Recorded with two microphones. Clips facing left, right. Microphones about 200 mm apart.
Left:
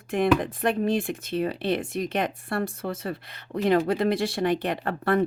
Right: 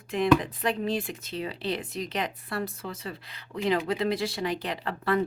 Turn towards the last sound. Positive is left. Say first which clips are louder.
# left 3 dB
turn(degrees=50)  # may be behind; listen again after turning